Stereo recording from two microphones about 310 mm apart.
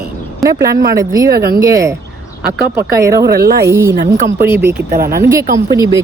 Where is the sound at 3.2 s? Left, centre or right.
Right.